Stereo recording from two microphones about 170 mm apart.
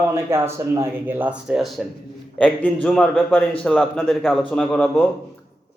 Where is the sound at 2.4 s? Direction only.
5° left (ahead or behind).